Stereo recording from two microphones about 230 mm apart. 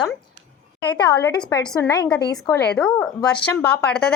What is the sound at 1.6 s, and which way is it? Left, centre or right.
Speech, centre.